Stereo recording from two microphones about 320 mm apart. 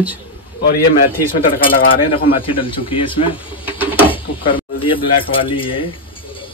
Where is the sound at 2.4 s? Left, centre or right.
Centre.